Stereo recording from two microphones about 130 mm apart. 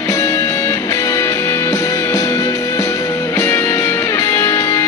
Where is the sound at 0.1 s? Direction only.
20° left (ahead or behind).